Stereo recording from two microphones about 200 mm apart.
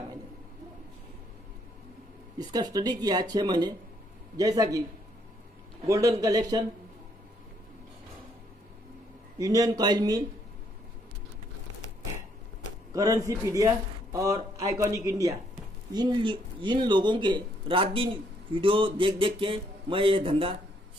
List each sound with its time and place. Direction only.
2.3 s a man's voice: 20° right (ahead or behind)
5.9 s a man's voice: 15° right (ahead or behind)
9.4 s a man's voice: 15° right (ahead or behind)
12.9 s a man's voice: 15° right (ahead or behind)